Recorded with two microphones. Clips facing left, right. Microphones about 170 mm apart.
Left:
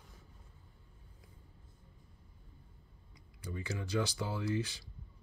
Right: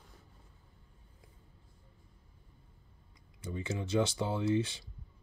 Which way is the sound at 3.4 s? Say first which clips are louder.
Right 3 dB; 25° right (ahead or behind).